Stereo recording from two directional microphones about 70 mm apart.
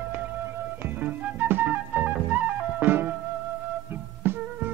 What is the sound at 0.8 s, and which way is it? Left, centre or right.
Music, right.